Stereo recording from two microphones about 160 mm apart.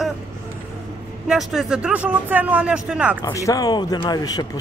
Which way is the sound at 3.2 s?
20° left (ahead or behind).